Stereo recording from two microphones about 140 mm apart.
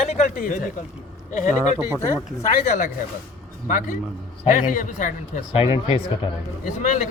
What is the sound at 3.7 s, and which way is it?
A man's voice, 70° left (ahead or behind).